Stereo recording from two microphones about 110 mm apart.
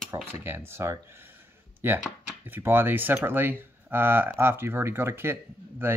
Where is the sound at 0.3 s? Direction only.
20° right (ahead or behind).